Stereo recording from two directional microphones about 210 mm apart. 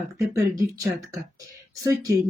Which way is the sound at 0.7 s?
15° right (ahead or behind).